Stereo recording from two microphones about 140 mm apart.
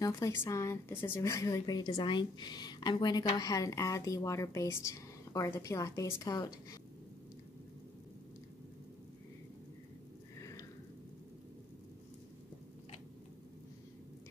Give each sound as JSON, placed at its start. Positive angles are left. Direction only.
{"t": 0.0, "sound": "speech", "side_deg": 20}